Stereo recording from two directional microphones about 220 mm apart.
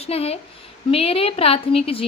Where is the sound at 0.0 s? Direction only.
25° left (ahead or behind).